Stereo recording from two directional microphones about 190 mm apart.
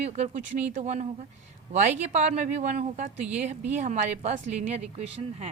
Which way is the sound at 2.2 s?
40° right (ahead or behind).